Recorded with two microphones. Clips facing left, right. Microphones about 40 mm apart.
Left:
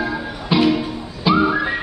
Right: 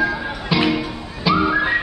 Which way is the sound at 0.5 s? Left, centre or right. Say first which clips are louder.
Left 2 dB; centre.